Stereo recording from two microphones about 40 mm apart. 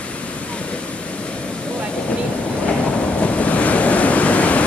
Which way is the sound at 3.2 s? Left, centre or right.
Left.